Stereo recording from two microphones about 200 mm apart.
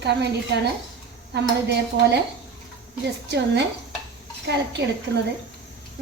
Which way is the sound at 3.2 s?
60° right (ahead or behind).